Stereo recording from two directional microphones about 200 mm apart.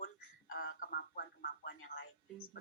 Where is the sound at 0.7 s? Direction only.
45° left (ahead or behind).